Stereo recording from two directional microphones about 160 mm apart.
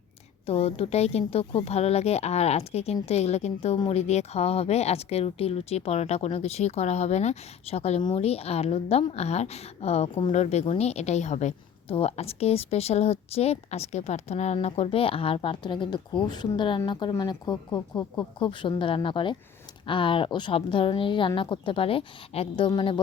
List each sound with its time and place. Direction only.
0.4 s a woman's voice: 40° left (ahead or behind)